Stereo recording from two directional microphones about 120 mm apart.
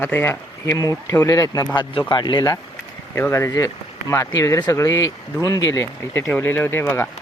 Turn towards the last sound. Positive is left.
turn(degrees=20)  # may be behind; listen again after turning